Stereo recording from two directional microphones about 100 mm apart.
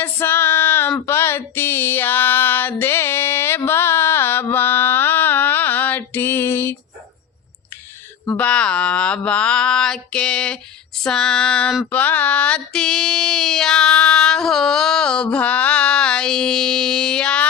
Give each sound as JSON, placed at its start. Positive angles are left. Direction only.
{"t": 0.0, "sound": "female singing", "side_deg": 20}
{"t": 3.7, "sound": "mantra", "side_deg": 25}
{"t": 8.4, "sound": "a sound", "side_deg": 10}